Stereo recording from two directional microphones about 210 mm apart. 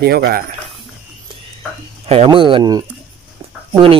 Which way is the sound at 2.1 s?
25° right (ahead or behind).